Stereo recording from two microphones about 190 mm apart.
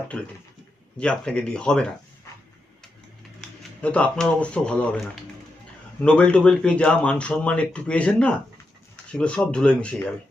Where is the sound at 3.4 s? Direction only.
5° left (ahead or behind).